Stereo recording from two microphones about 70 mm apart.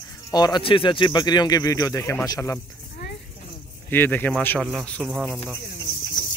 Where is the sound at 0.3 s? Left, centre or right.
Left.